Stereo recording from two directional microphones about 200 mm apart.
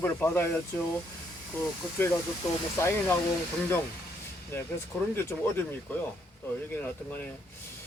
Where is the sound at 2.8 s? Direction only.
10° left (ahead or behind).